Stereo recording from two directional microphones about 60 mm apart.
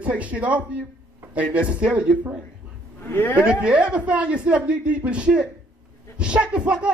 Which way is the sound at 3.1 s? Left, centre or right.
Left.